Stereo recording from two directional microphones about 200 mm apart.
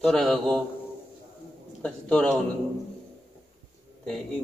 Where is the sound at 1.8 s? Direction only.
5° left (ahead or behind).